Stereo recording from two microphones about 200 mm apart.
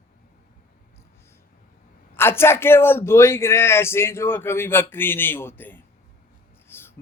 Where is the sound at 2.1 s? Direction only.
10° left (ahead or behind).